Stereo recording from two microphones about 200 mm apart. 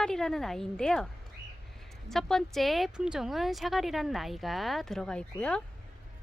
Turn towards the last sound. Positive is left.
turn(degrees=5)  # may be behind; listen again after turning